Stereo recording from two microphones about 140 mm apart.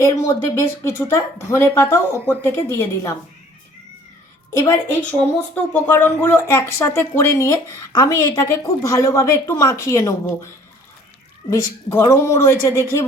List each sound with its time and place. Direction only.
0.0 s speech: 25° left (ahead or behind)
4.5 s speech: 25° left (ahead or behind)
5.5 s speech: 10° left (ahead or behind)
11.5 s speech: 20° left (ahead or behind)